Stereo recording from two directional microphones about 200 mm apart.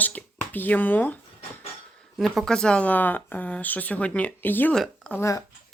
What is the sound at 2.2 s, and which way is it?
Speech, centre (ahead or behind).